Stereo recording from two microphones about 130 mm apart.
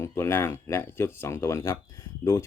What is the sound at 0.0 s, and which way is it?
Speech, 20° left (ahead or behind).